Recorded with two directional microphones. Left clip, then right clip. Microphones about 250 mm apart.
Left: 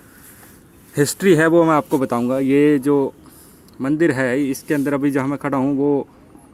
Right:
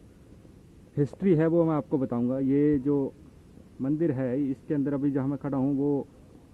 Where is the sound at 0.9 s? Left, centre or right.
Centre; by 6.1 s left.